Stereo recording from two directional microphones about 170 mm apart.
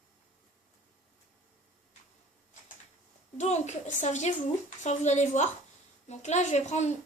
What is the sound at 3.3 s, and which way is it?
A child's voice, 40° left (ahead or behind).